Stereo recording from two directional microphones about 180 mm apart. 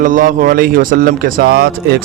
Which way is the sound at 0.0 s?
45° right (ahead or behind).